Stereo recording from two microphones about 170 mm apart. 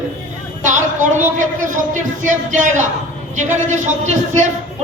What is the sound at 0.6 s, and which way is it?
A man's voice, 50° right (ahead or behind).